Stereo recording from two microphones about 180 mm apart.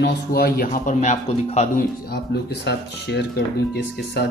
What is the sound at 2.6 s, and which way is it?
Speech, 70° left (ahead or behind).